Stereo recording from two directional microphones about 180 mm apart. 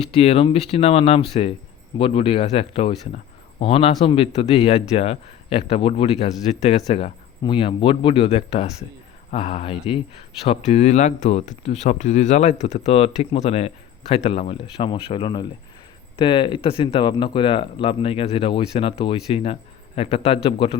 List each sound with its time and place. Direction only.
0.1 s speech: 35° left (ahead or behind)